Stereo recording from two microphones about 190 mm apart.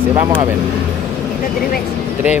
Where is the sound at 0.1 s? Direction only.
15° right (ahead or behind).